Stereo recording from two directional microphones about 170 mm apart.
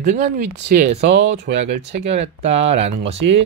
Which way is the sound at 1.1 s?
85° right.